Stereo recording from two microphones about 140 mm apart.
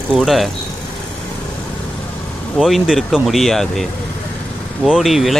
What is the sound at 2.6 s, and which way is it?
Speech, centre (ahead or behind).